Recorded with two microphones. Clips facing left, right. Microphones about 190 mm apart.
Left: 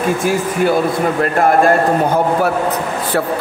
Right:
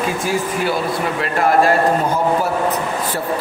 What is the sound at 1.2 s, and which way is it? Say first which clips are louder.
Speech: left 2 dB; 50° left (ahead or behind).